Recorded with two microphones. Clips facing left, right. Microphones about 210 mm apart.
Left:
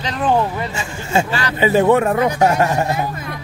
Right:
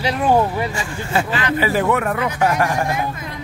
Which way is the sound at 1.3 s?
40° left (ahead or behind).